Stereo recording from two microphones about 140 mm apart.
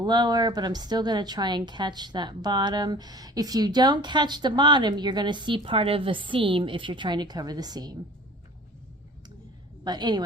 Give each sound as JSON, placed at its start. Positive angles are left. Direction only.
{"t": 0.0, "sound": "a woman's voice", "side_deg": -30}
{"t": 9.8, "sound": "a woman's voice", "side_deg": -30}